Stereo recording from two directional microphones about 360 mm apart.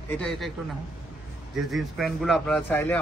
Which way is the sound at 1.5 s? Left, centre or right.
Centre.